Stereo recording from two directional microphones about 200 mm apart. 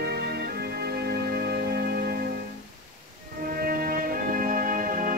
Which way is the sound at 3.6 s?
45° right (ahead or behind).